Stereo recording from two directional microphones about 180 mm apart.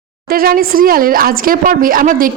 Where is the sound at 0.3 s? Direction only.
55° right (ahead or behind).